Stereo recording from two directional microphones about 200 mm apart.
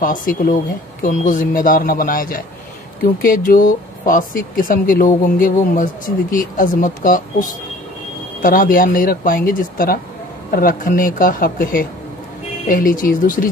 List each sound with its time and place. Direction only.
0.0 s speech: 45° left (ahead or behind)